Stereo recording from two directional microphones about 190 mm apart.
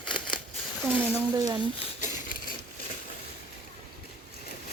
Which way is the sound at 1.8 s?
40° left (ahead or behind).